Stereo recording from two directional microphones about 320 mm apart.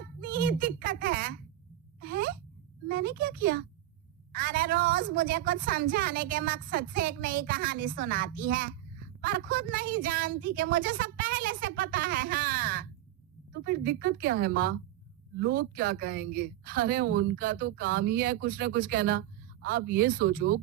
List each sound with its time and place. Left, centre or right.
0.0 s a sound: right
2.0 s sigh: right
2.8 s a woman's voice: right